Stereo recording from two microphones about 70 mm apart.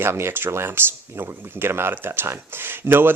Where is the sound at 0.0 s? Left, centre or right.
Right.